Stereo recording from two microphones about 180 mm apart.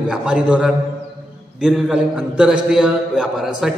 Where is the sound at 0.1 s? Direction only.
5° right (ahead or behind).